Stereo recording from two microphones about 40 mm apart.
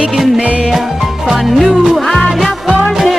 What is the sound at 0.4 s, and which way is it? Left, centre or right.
Music, right.